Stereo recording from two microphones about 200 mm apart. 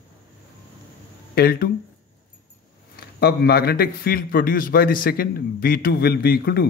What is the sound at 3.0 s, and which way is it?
A man's voice, 50° left (ahead or behind).